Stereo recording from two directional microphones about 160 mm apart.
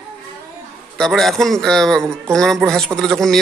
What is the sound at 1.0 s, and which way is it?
A man's voice, centre (ahead or behind).